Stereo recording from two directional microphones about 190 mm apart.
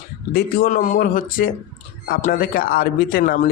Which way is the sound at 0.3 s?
45° left (ahead or behind).